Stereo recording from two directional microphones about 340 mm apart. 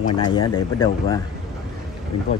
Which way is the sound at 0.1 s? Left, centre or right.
Centre.